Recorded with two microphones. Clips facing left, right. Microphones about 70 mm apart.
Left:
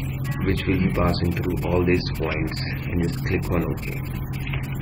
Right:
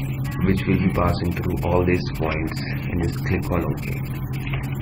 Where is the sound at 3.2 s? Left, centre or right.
Centre.